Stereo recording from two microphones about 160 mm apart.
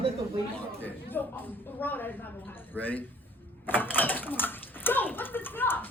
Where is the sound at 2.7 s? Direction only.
10° left (ahead or behind).